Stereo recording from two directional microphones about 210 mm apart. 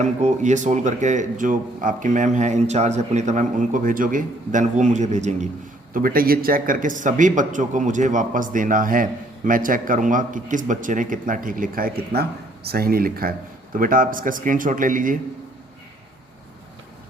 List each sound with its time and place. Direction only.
0.0 s a man's voice: 35° right (ahead or behind)